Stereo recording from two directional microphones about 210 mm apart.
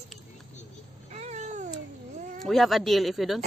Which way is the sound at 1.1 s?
35° right (ahead or behind).